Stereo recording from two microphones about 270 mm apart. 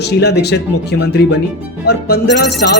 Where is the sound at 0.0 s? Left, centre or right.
Left.